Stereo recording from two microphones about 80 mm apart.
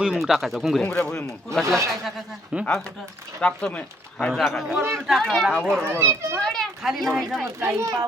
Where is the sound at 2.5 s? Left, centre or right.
Centre.